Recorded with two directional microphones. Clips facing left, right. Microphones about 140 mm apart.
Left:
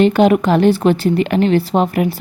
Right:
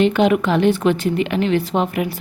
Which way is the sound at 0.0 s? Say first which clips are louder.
Left 4 dB; 40° left (ahead or behind).